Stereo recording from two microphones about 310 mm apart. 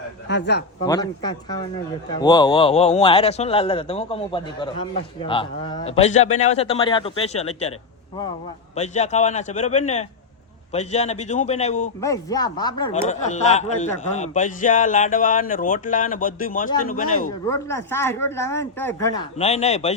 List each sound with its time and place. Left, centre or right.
0.3 s a man's voice: left
0.9 s speech: centre
8.7 s speech: left
11.9 s speech: centre; by 17.2 s left
17.5 s speech: centre
19.4 s speech: left